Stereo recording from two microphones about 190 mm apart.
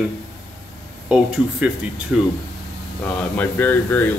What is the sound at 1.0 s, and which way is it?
Speech, 5° right (ahead or behind).